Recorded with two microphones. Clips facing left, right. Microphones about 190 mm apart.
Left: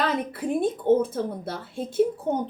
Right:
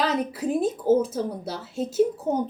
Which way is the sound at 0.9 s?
5° right (ahead or behind).